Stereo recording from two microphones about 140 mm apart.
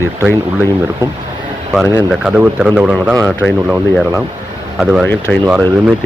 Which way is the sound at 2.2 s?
10° right (ahead or behind).